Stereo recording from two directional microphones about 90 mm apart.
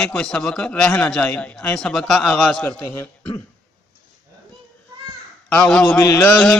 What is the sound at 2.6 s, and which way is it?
Speech, 25° left (ahead or behind).